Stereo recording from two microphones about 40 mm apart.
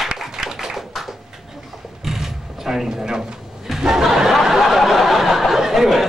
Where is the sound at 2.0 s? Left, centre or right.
Centre.